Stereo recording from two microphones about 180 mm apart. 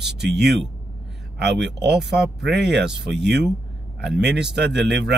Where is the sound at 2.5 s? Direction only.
70° right (ahead or behind).